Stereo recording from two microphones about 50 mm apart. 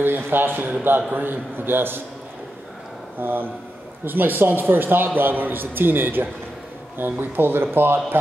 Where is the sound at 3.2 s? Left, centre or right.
Right.